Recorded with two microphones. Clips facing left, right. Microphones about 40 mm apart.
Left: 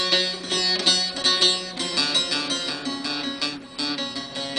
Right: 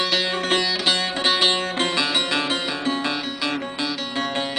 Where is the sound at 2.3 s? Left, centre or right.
Right.